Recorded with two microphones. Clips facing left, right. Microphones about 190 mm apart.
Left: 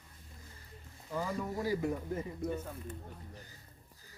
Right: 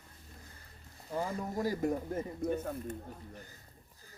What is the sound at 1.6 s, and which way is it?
Speech, 45° right (ahead or behind).